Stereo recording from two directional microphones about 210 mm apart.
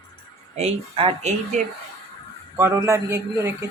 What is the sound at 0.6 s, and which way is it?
Speech, 30° right (ahead or behind).